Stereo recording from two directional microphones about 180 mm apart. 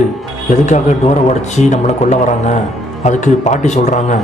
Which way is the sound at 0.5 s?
40° left (ahead or behind).